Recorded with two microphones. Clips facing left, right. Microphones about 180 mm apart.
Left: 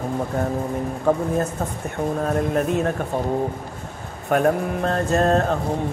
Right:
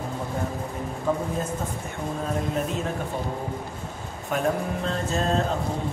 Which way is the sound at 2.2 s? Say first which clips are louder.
Left 5 dB; 60° left (ahead or behind).